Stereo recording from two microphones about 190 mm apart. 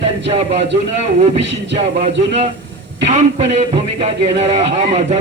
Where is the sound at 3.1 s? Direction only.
35° right (ahead or behind).